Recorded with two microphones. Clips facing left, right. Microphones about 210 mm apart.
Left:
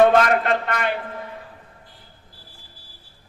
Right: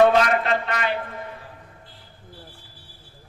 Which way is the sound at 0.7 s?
55° left (ahead or behind).